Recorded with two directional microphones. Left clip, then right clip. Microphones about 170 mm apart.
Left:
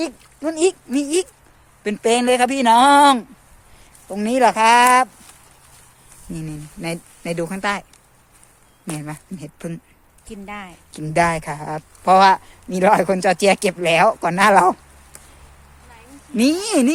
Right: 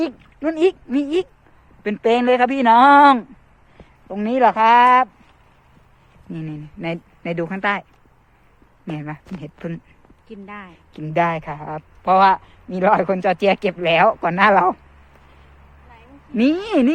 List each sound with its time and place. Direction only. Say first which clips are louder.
0.0 s speech: right 2 dB; 5° right (ahead or behind)
4.1 s speech: even; 20° left (ahead or behind)
6.3 s speech: even; 15° left (ahead or behind)
8.9 s speech: even; 15° left (ahead or behind)
10.2 s speech: left 3 dB; 65° left (ahead or behind)
10.9 s speech: left 1 dB; 25° left (ahead or behind)
16.3 s speech: even; 15° left (ahead or behind)